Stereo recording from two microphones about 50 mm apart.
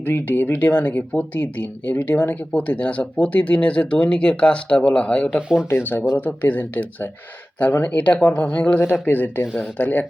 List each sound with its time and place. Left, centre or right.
0.0 s speech: left
2.6 s speech: left
5.4 s speech: centre
5.6 s speech: left
8.7 s speech: left
9.6 s speech: left